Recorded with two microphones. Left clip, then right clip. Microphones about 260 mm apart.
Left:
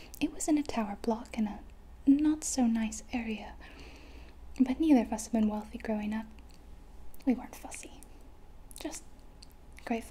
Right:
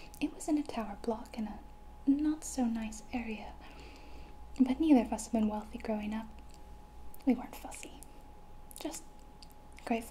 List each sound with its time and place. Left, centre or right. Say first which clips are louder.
0.1 s a woman's voice: left 4 dB; left
7.2 s a woman's voice: even; centre
8.7 s a sound: left 1 dB; centre